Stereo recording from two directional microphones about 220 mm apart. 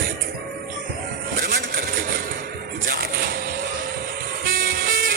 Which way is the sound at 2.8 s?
40° right (ahead or behind).